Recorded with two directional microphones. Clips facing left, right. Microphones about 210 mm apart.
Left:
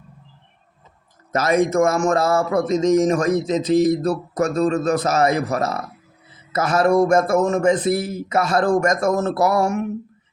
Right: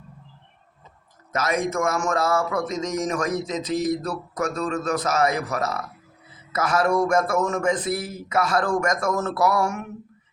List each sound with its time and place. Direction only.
1.3 s speech: 30° left (ahead or behind)